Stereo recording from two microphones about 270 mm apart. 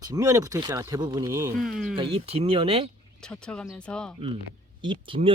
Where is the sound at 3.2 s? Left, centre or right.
Centre.